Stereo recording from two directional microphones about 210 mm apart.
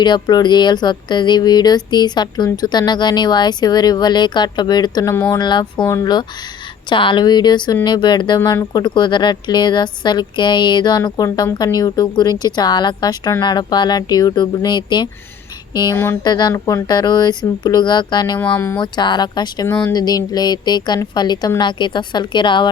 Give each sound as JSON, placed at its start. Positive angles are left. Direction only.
{"t": 0.0, "sound": "a woman's voice", "side_deg": 20}
{"t": 18.3, "sound": "speech", "side_deg": 10}
{"t": 18.8, "sound": "a woman's voice", "side_deg": 20}